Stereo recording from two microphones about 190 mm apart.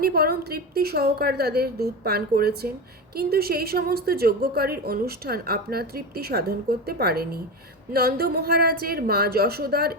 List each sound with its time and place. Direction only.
0.0 s a woman's voice: 55° right (ahead or behind)